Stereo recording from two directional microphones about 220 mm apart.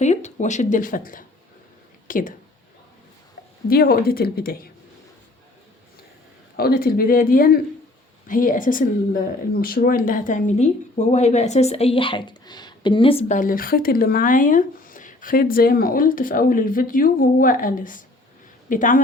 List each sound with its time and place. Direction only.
0.0 s speech: 30° left (ahead or behind)
3.7 s speech: 45° left (ahead or behind)
6.6 s speech: 45° left (ahead or behind)